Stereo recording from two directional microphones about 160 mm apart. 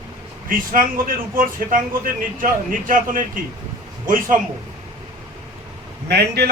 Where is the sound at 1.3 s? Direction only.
60° right (ahead or behind).